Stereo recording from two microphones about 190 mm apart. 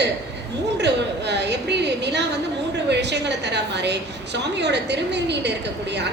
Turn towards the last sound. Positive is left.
turn(degrees=-65)  # may be behind; listen again after turning